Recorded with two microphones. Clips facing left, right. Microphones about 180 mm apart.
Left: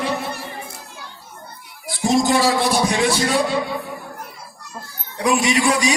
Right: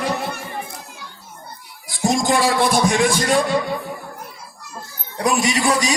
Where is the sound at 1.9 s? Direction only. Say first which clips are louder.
Left 1 dB; 50° right (ahead or behind).